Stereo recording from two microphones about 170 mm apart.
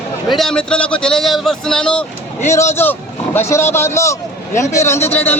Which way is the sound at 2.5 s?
15° left (ahead or behind).